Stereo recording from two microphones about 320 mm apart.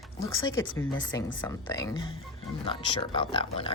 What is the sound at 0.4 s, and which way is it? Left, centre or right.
Speech, centre.